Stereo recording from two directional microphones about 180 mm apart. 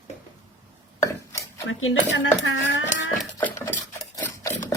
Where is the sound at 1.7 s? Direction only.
90° left.